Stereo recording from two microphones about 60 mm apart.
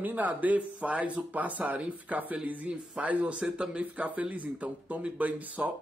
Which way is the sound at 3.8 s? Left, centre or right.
Right.